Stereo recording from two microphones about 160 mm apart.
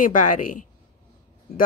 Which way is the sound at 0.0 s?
55° left (ahead or behind).